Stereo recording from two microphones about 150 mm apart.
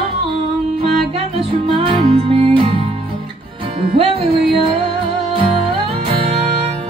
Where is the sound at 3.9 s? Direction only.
40° right (ahead or behind).